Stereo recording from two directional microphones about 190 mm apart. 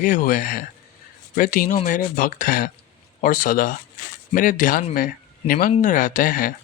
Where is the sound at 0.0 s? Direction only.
45° left (ahead or behind).